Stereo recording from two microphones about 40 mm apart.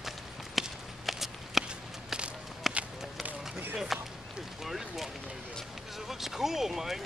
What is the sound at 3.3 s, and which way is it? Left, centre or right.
Run, right.